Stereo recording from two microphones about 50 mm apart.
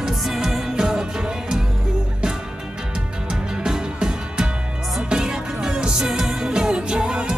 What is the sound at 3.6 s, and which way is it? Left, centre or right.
Music, centre.